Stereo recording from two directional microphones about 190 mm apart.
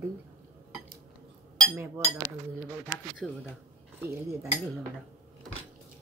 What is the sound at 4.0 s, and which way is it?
Speech, 15° right (ahead or behind).